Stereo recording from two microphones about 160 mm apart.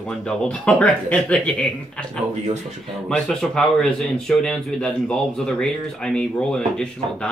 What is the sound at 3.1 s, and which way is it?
Speech, 5° left (ahead or behind).